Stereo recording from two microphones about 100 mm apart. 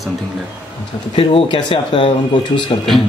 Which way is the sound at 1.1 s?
65° left (ahead or behind).